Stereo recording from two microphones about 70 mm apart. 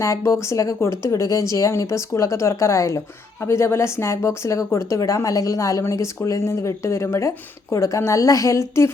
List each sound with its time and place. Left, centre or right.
0.0 s speech: left